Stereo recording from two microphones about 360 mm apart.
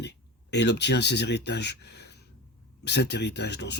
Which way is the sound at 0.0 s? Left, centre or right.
Left.